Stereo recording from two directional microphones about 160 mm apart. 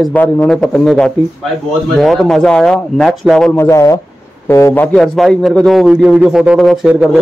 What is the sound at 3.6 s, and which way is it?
Speech, 20° left (ahead or behind).